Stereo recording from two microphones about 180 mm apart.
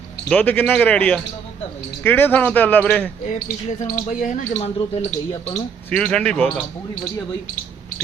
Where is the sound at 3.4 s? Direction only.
50° left (ahead or behind).